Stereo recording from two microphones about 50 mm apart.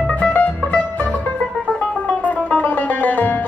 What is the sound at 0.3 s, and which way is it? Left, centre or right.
Music, left.